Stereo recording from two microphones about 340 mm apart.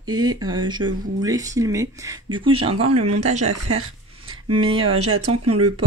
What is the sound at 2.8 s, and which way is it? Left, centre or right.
Speech, right.